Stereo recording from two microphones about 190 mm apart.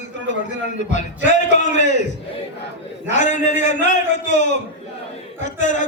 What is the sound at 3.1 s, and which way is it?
Speech, 40° left (ahead or behind).